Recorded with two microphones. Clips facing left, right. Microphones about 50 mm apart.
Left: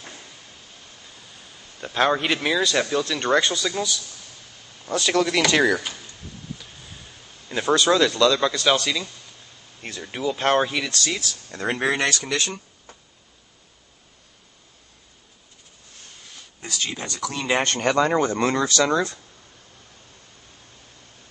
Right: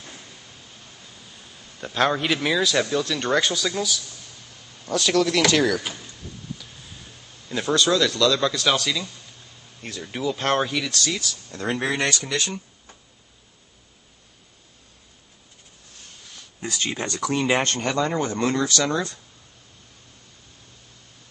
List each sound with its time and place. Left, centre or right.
1.8 s speech: centre
7.4 s speech: centre
8.3 s speech: centre
11.6 s speech: centre
12.3 s speech: centre
16.6 s speech: right
17.4 s speech: centre
17.9 s speech: left